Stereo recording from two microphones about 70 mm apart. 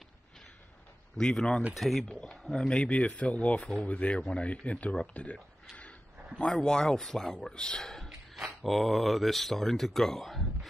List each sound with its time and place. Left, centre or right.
1.1 s speech: centre
2.0 s speech: centre